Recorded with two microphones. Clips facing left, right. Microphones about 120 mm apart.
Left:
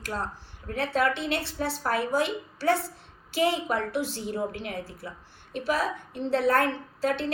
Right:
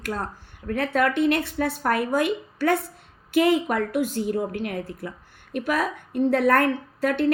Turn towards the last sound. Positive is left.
turn(degrees=-55)  # may be behind; listen again after turning